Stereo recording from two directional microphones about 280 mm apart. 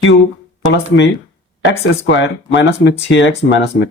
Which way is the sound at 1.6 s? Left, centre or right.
Left.